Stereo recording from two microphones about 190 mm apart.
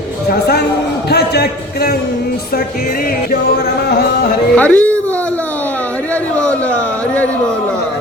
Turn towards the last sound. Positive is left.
turn(degrees=5)  # may be behind; listen again after turning